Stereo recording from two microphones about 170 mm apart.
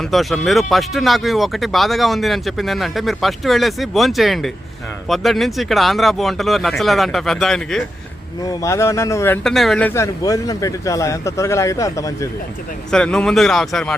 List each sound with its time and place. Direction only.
0.0 s speech: centre (ahead or behind)
8.4 s speech: 15° left (ahead or behind)
9.4 s speech: centre (ahead or behind); by 12.3 s 20° left (ahead or behind)
12.9 s speech: 5° left (ahead or behind)